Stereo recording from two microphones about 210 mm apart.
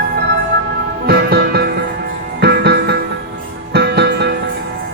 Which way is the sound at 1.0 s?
50° right (ahead or behind).